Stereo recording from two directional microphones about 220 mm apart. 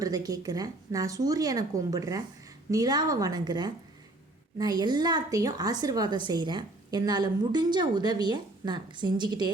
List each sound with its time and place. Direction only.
0.0 s speech: 15° right (ahead or behind)